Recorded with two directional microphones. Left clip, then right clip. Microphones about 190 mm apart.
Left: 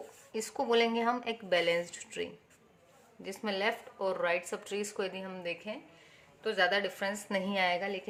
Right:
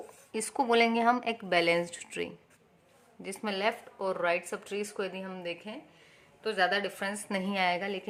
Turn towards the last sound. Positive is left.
turn(degrees=-20)  # may be behind; listen again after turning